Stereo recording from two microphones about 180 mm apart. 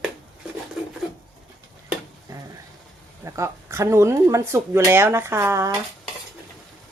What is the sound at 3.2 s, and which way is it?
Speech, 15° right (ahead or behind).